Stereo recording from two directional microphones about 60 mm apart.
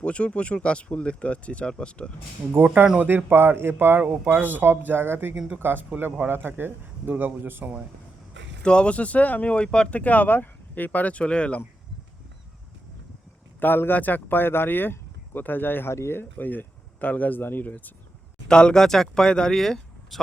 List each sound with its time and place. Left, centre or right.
0.0 s speech: left
3.0 s a man's voice: right
8.6 s speech: centre
13.6 s speech: left
16.4 s speech: left
18.4 s speech: centre